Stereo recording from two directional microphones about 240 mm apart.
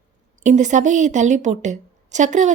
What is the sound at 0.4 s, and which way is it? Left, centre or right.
A woman's voice, right.